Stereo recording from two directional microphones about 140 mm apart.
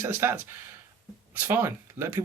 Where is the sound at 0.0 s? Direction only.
15° right (ahead or behind).